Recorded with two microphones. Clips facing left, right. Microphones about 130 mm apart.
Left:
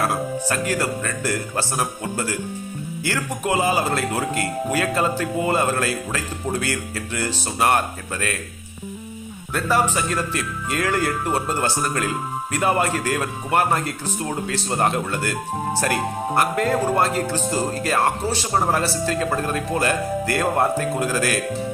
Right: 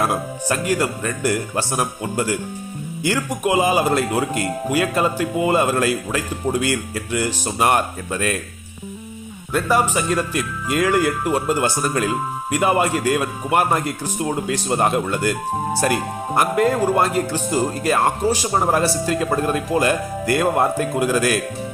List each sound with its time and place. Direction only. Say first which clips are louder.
0.0 s speech: right 1 dB; 15° right (ahead or behind)
9.5 s speech: right 2 dB; 15° right (ahead or behind)